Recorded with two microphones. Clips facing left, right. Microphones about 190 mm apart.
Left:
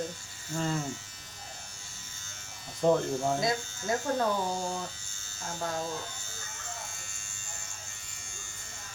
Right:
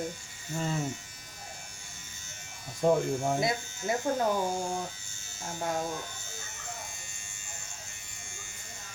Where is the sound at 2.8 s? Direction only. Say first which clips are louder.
Even; 15° right (ahead or behind).